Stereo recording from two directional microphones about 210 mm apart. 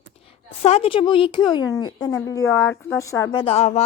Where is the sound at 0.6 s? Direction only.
30° left (ahead or behind).